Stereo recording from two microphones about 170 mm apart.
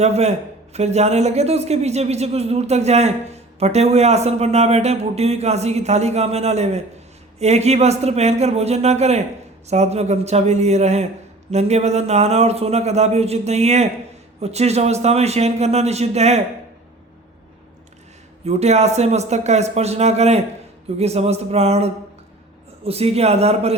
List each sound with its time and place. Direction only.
0.0 s a man's voice: 40° right (ahead or behind)
18.4 s a man's voice: 40° right (ahead or behind)